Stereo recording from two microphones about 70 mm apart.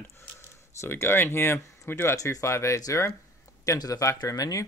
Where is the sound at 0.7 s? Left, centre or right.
Left.